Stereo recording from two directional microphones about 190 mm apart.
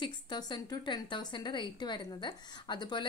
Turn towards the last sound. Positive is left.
turn(degrees=25)  # may be behind; listen again after turning